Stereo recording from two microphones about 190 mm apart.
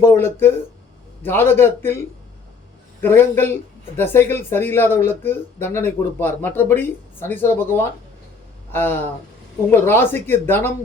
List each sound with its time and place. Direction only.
0.0 s speech: 10° left (ahead or behind)
3.0 s speech: 10° left (ahead or behind)